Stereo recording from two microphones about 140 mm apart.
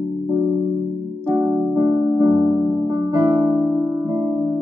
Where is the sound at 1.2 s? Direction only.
20° right (ahead or behind).